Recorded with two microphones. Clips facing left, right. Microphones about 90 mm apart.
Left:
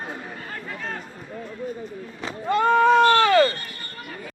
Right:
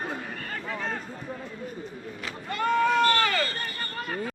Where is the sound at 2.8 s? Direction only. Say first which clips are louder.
Left 7 dB; 25° left (ahead or behind).